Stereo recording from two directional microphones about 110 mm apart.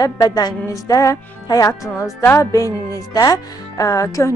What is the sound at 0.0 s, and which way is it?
A woman's voice, 35° left (ahead or behind).